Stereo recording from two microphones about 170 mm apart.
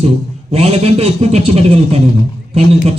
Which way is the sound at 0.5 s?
35° right (ahead or behind).